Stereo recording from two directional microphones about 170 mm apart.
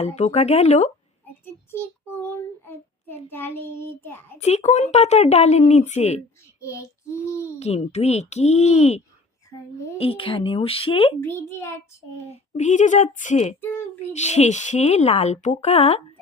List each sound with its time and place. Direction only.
0.0 s a woman's voice: 40° left (ahead or behind)
1.7 s child singing: 15° left (ahead or behind)
4.4 s a woman's voice: 40° left (ahead or behind)
6.6 s child singing: 15° left (ahead or behind)
7.6 s a woman's voice: 40° left (ahead or behind)
10.0 s a woman's voice: 30° left (ahead or behind)
11.2 s child singing: 15° left (ahead or behind)
12.3 s a woman's voice: 45° left (ahead or behind)